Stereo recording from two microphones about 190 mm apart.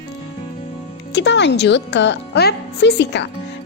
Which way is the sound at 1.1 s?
65° left (ahead or behind).